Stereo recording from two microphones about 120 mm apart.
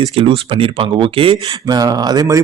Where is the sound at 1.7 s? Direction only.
35° right (ahead or behind).